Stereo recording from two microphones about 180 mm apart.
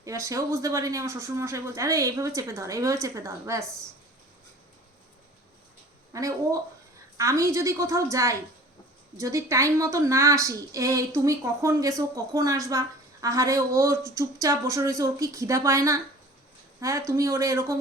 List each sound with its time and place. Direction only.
0.0 s speech: 15° right (ahead or behind)
6.1 s speech: 20° right (ahead or behind)